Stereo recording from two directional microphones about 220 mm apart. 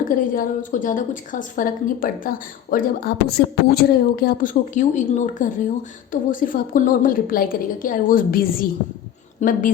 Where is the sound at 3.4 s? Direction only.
50° left (ahead or behind).